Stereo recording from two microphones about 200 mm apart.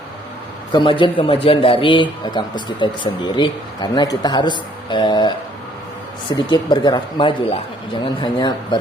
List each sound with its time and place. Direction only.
0.7 s a man's voice: 25° left (ahead or behind)
6.3 s a man's voice: 20° left (ahead or behind)